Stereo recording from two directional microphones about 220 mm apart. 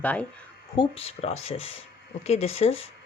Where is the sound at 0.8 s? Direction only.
25° left (ahead or behind).